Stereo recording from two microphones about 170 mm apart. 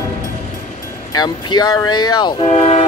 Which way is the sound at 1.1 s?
25° left (ahead or behind).